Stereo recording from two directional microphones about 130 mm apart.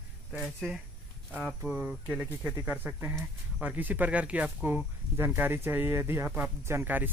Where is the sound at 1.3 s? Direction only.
10° right (ahead or behind).